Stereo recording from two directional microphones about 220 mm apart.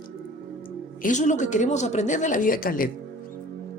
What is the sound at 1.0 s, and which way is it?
A woman's voice, 35° left (ahead or behind).